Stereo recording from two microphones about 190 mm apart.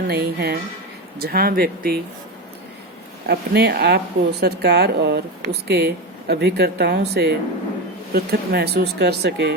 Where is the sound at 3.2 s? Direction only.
55° right (ahead or behind).